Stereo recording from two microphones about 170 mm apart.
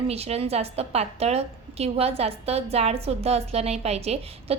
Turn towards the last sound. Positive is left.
turn(degrees=-40)  # may be behind; listen again after turning